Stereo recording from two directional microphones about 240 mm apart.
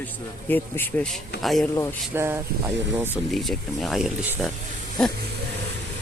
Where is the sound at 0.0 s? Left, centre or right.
Centre.